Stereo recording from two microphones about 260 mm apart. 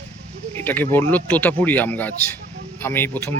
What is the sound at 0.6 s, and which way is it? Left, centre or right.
Speech, centre.